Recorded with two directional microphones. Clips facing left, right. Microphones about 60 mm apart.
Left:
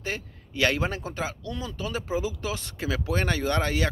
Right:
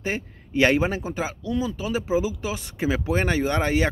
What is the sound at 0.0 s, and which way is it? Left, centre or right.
Speech, right.